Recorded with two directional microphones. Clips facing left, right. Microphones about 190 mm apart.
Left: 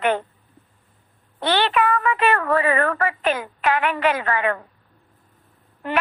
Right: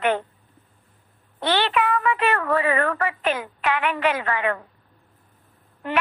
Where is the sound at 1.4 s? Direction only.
45° left (ahead or behind).